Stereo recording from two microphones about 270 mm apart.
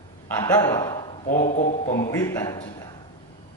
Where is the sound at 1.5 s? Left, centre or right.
Left.